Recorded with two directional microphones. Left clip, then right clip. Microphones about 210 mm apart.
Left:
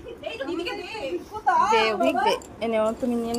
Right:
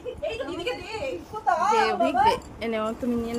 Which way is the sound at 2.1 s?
30° right (ahead or behind).